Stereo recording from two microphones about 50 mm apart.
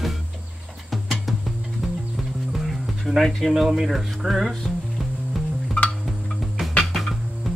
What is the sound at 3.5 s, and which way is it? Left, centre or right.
Speech, centre.